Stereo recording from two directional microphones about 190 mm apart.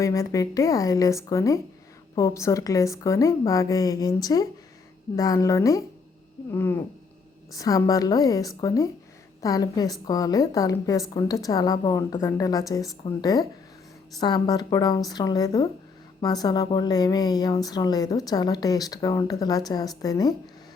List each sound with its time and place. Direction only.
0.0 s a woman's voice: 15° left (ahead or behind)